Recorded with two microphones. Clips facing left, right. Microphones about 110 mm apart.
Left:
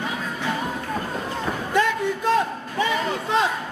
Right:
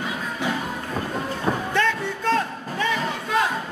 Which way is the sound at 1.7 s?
15° left (ahead or behind).